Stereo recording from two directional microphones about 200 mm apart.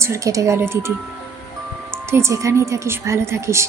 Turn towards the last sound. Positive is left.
turn(degrees=-15)  # may be behind; listen again after turning